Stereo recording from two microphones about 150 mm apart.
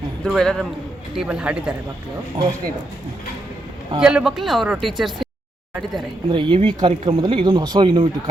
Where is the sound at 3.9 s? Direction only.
5° right (ahead or behind).